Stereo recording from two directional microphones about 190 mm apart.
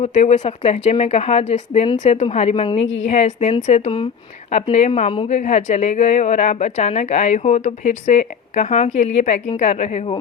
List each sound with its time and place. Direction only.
0.0 s a woman's voice: 35° left (ahead or behind)
2.8 s a woman's voice: 80° left
3.1 s a woman's voice: 35° left (ahead or behind)